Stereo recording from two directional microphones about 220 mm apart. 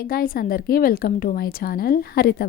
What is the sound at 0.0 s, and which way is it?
A woman's voice, 40° left (ahead or behind).